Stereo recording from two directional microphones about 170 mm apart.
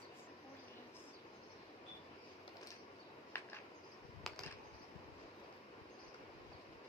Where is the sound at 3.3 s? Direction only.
10° left (ahead or behind).